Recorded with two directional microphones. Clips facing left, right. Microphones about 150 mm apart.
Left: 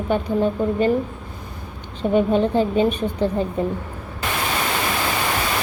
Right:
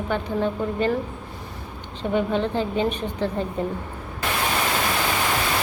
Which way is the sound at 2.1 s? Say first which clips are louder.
Left 5 dB; 15° left (ahead or behind).